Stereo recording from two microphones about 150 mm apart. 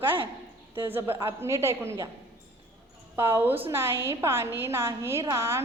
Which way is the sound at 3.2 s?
15° right (ahead or behind).